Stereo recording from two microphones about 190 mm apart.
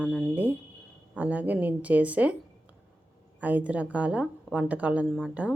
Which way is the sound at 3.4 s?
10° right (ahead or behind).